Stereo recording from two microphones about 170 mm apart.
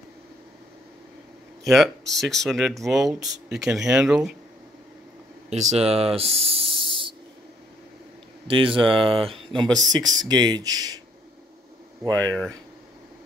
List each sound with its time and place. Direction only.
1.6 s speech: centre (ahead or behind)
5.5 s spray: 40° right (ahead or behind)
8.5 s speech: 30° right (ahead or behind)
12.2 s speech: 5° left (ahead or behind)